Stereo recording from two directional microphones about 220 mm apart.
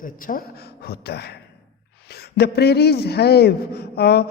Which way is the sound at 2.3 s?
50° left (ahead or behind).